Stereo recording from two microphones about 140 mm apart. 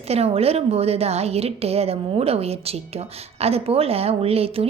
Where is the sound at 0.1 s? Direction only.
45° right (ahead or behind).